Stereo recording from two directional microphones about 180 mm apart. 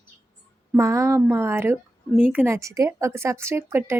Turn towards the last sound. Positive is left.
turn(degrees=-10)  # may be behind; listen again after turning